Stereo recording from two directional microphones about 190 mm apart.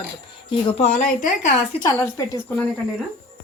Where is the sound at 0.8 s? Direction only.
45° left (ahead or behind).